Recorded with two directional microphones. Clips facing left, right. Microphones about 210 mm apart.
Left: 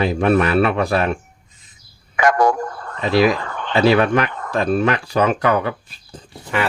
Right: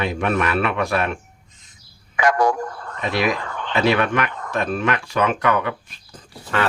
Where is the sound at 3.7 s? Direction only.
35° left (ahead or behind).